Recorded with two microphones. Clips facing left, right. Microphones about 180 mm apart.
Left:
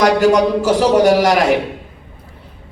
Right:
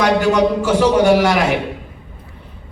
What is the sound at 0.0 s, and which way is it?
A man's voice, 40° left (ahead or behind).